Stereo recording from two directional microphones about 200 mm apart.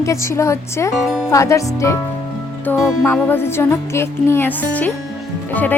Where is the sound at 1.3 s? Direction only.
15° left (ahead or behind).